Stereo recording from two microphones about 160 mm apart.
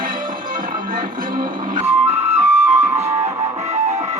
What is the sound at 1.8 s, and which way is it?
Music, 15° right (ahead or behind).